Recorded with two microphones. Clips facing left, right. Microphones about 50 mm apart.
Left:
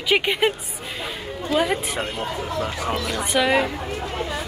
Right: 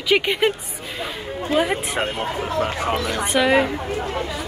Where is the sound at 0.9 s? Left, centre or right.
Right.